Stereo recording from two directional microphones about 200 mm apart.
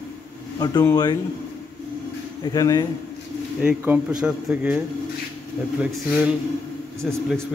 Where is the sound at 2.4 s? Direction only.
20° left (ahead or behind).